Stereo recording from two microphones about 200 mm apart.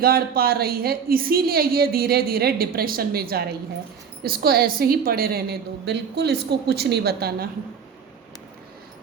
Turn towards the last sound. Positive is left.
turn(degrees=-50)  # may be behind; listen again after turning